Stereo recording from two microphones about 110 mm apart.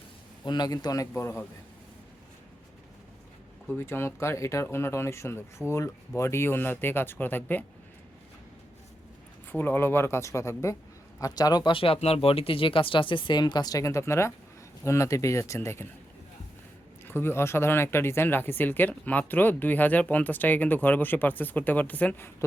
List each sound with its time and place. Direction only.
0.4 s a man's voice: 40° left (ahead or behind)
1.1 s speech: 20° left (ahead or behind)
3.7 s speech: 20° left (ahead or behind)
9.5 s speech: 20° left (ahead or behind)
17.1 s speech: 20° left (ahead or behind)